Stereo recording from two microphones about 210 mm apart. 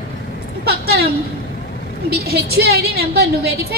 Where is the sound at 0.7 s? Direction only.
45° right (ahead or behind).